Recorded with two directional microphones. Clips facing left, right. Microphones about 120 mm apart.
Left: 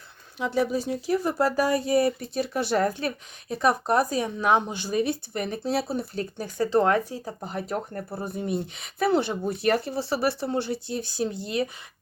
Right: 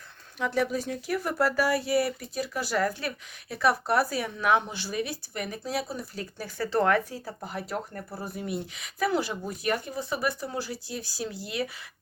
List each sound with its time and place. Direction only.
0.3 s speech: 20° left (ahead or behind)
4.9 s speech: 35° left (ahead or behind)